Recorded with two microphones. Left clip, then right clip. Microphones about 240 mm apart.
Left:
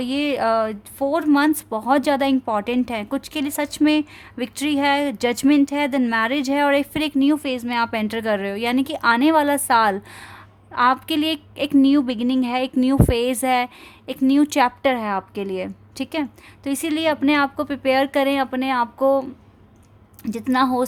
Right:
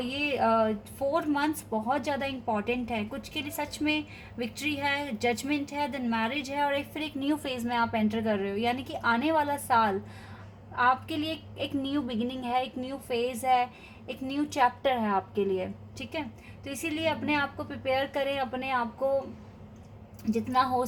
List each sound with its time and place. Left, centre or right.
0.1 s a woman's voice: left
20.2 s a woman's voice: left